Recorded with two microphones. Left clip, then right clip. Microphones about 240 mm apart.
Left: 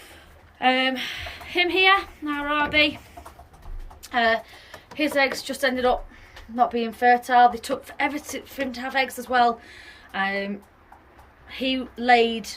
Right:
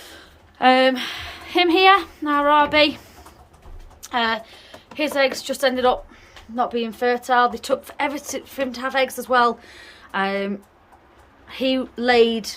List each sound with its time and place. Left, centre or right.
0.0 s speech: right
4.1 s a woman's voice: centre